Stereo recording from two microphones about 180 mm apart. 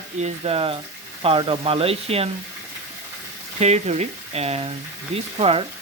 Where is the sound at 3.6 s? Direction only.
40° right (ahead or behind).